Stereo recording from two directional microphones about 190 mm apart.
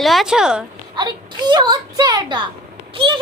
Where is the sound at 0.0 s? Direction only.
Centre (ahead or behind).